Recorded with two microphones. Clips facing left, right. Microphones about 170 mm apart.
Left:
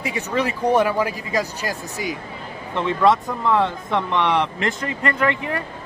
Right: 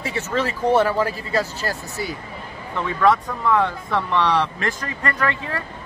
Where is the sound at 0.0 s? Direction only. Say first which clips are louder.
Left 1 dB; 15° left (ahead or behind).